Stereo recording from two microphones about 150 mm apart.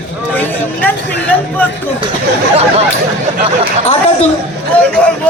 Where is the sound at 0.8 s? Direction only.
10° left (ahead or behind).